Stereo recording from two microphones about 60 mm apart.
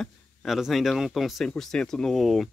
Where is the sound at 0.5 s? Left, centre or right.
Centre.